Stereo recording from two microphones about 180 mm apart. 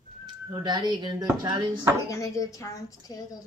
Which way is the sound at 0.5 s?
25° right (ahead or behind).